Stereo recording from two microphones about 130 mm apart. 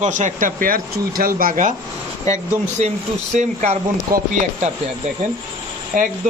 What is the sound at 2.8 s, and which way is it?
A man's voice, 60° right (ahead or behind).